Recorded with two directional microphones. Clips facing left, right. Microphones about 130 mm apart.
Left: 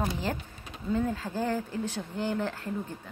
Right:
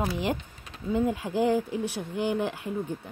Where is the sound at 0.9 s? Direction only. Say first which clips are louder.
Right 3 dB; 15° right (ahead or behind).